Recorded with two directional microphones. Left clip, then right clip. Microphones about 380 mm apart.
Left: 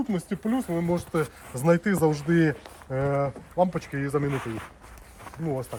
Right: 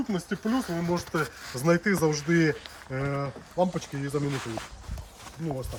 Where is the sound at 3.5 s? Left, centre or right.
Centre.